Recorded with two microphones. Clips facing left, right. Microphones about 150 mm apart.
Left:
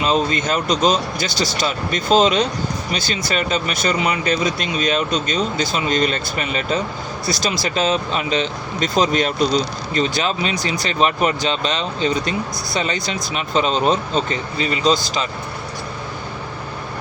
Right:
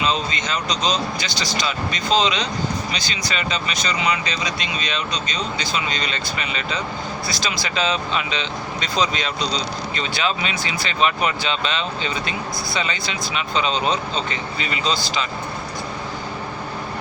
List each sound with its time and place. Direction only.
0.0 s speech: 45° left (ahead or behind)